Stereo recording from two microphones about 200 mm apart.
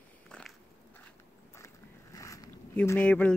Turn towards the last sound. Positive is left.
turn(degrees=5)  # may be behind; listen again after turning